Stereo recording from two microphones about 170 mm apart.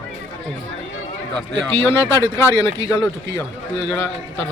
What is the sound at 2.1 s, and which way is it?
A man's voice, 15° left (ahead or behind).